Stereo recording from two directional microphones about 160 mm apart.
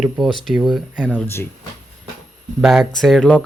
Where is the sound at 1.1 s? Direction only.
15° left (ahead or behind).